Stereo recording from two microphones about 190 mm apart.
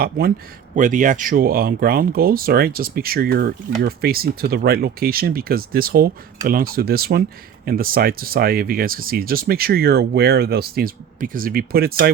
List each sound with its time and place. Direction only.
0.0 s speech: 50° right (ahead or behind)